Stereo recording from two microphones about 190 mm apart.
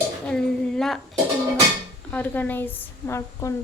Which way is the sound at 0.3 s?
5° left (ahead or behind).